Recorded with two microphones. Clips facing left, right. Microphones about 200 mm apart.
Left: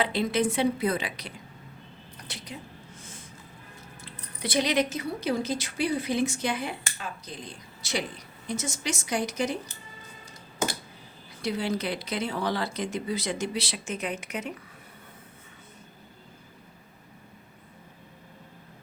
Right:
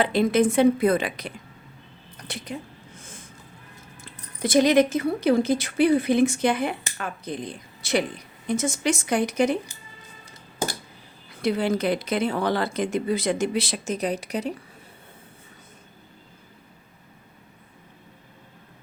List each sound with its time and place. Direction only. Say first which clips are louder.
0.0 s speech: right 6 dB; 50° right (ahead or behind)
4.4 s a woman's voice: right 8 dB; 45° right (ahead or behind)
11.4 s speech: right 6 dB; 55° right (ahead or behind); by 14.6 s 35° right (ahead or behind)